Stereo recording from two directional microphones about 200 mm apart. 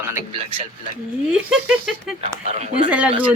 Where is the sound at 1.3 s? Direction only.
5° right (ahead or behind).